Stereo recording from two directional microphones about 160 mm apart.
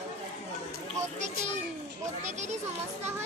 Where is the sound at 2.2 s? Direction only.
45° right (ahead or behind).